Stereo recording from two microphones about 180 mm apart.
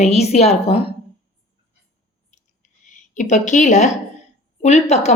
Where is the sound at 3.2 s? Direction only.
40° left (ahead or behind).